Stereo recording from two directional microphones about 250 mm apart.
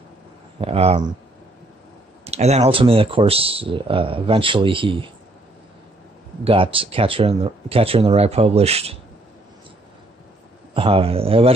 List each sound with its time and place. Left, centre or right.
0.6 s speech: right
2.2 s speech: right
6.4 s speech: right
10.7 s speech: right